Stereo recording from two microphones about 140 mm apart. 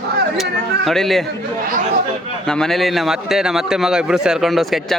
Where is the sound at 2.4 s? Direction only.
5° left (ahead or behind).